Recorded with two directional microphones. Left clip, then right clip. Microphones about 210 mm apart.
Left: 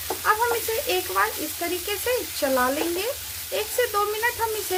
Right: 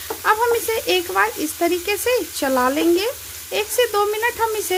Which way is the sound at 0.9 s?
45° right (ahead or behind).